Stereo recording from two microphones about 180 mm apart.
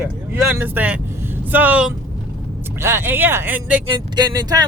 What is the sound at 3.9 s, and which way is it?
Speech, 25° right (ahead or behind).